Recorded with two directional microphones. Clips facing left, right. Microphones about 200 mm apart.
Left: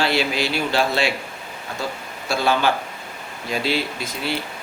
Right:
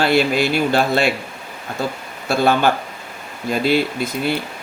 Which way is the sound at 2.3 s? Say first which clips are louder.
Right 4 dB; 55° right (ahead or behind).